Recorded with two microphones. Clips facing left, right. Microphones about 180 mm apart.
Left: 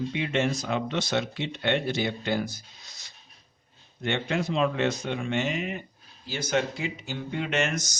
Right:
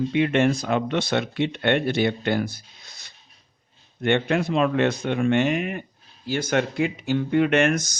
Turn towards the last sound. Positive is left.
turn(degrees=-60)  # may be behind; listen again after turning